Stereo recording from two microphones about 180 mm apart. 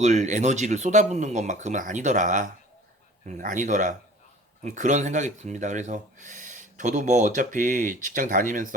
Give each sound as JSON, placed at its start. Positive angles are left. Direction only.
{"t": 0.0, "sound": "speech", "side_deg": -40}